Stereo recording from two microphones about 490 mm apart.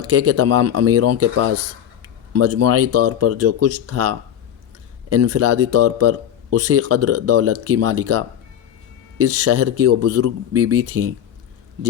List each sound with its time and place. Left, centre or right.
0.0 s speech: right